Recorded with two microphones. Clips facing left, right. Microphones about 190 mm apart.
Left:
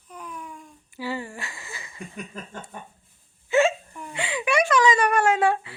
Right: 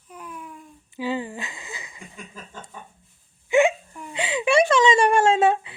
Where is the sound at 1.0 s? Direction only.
15° right (ahead or behind).